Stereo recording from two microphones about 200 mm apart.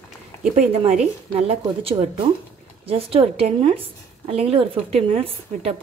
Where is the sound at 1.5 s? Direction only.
30° right (ahead or behind).